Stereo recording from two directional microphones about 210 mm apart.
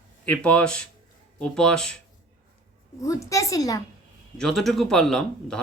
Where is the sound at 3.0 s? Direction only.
15° left (ahead or behind).